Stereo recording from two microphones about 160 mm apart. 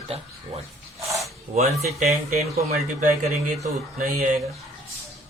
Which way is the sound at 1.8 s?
45° right (ahead or behind).